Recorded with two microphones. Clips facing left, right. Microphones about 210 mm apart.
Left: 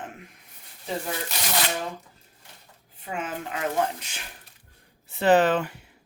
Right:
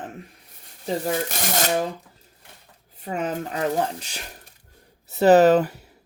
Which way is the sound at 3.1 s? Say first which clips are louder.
Right 5 dB; 40° right (ahead or behind).